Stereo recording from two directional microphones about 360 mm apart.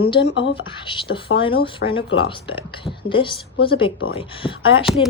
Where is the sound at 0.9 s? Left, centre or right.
Centre.